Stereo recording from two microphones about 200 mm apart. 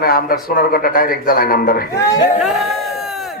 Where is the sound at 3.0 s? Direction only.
Centre (ahead or behind).